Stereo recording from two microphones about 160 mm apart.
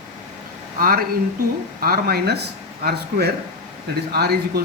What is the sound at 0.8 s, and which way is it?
Speech, 65° right (ahead or behind).